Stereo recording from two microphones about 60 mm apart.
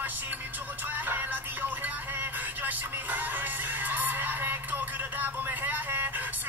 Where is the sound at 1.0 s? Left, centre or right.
Right.